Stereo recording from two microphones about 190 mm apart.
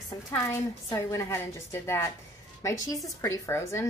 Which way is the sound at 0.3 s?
15° left (ahead or behind).